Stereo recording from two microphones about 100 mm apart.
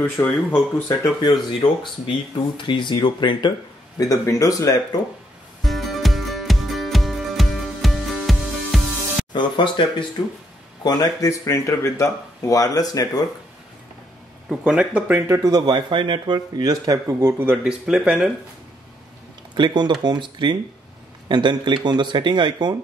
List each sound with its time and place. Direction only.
0.5 s speech: 25° left (ahead or behind)
1.2 s speech: 55° left (ahead or behind)
4.1 s speech: 35° left (ahead or behind)
5.6 s music: centre (ahead or behind)
9.3 s speech: 50° left (ahead or behind)
10.8 s speech: 40° left (ahead or behind)
14.5 s speech: 5° right (ahead or behind)
15.1 s speech: 25° right (ahead or behind)
15.4 s speech: 45° right (ahead or behind); by 17.5 s 30° right (ahead or behind)
17.5 s speech: 10° right (ahead or behind)
19.5 s speech: 50° right (ahead or behind)